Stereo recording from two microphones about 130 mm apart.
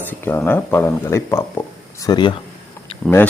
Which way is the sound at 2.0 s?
35° left (ahead or behind).